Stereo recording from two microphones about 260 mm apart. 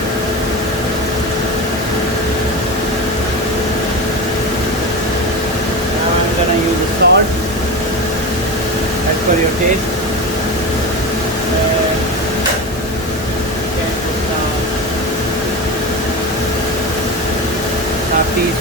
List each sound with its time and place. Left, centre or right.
7.0 s vehicle: right